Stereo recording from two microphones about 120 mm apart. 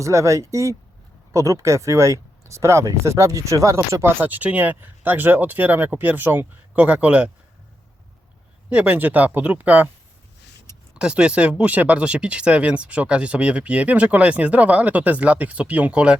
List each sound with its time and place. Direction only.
0.0 s speech: 25° right (ahead or behind)
8.7 s speech: 10° right (ahead or behind)
10.9 s speech: 10° right (ahead or behind)